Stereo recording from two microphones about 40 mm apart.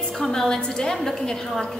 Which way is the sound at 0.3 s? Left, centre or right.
Centre.